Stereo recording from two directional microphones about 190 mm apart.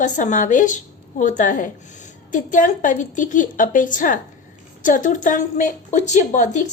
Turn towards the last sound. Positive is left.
turn(degrees=40)  # may be behind; listen again after turning